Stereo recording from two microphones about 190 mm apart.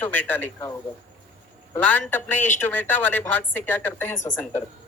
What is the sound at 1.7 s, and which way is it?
Speech, 10° left (ahead or behind).